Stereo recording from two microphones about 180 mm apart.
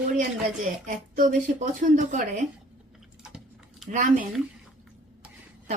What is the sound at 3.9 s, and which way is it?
Speech, 45° right (ahead or behind).